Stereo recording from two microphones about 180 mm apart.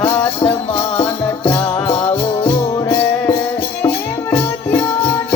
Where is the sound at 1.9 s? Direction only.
35° left (ahead or behind).